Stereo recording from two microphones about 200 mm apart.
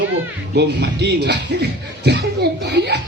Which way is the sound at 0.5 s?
55° right (ahead or behind).